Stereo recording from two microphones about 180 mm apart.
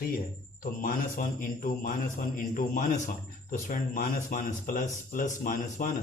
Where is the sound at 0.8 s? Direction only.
50° left (ahead or behind).